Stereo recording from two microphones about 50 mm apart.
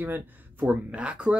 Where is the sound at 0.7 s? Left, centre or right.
Right.